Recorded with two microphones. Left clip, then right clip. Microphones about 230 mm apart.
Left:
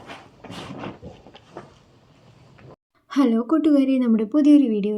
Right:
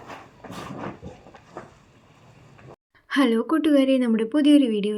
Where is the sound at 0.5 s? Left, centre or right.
Centre.